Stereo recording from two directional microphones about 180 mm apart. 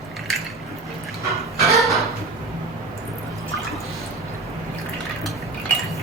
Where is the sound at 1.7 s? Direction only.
Centre (ahead or behind).